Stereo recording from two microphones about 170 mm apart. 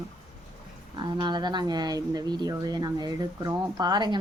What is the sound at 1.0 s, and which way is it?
Speech, 25° right (ahead or behind).